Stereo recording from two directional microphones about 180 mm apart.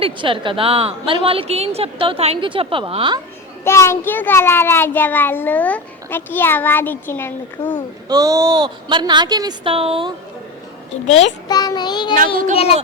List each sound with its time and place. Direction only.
0.0 s a woman's voice: 30° right (ahead or behind)
3.6 s a child's voice: 15° left (ahead or behind)
8.1 s speech: 20° right (ahead or behind)
11.0 s a child's voice: 35° left (ahead or behind)
11.4 s child singing: 20° left (ahead or behind)